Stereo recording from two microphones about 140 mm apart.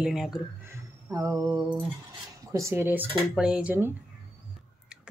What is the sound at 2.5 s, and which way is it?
Speech, 20° right (ahead or behind).